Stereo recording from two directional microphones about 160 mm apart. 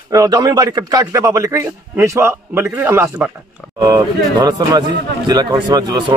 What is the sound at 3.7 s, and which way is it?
A man's voice, 25° right (ahead or behind).